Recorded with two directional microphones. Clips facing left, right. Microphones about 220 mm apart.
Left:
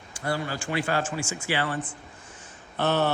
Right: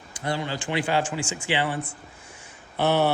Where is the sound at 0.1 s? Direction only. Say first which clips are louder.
Right 1 dB; 20° right (ahead or behind).